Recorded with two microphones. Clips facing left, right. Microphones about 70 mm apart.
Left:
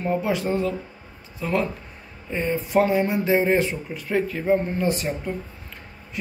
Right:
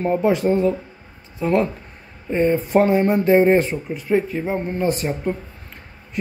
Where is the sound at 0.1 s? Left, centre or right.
Right.